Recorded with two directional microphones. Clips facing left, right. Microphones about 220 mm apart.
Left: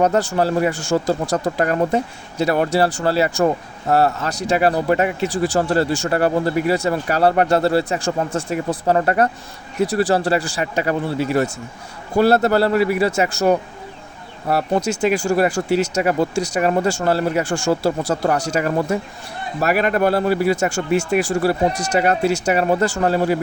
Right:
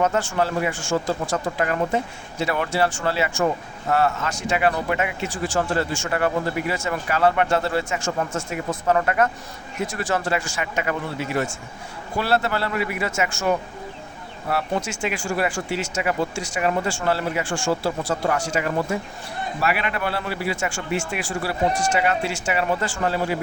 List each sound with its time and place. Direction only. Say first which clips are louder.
0.0 s speech: left 5 dB; 35° left (ahead or behind)